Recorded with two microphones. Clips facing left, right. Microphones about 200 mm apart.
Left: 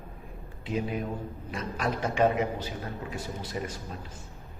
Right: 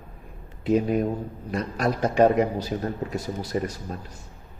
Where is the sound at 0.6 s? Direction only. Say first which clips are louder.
Right 9 dB; 45° right (ahead or behind).